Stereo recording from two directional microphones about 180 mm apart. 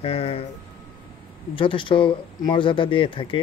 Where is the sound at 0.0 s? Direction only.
35° left (ahead or behind).